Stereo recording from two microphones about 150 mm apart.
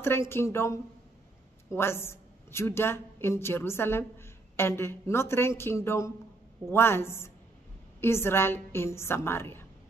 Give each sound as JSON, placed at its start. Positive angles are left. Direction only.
{"t": 0.0, "sound": "a woman's voice", "side_deg": 15}